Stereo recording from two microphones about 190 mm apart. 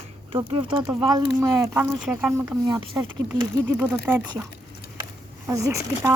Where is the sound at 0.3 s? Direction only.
25° right (ahead or behind); by 2.6 s 5° right (ahead or behind).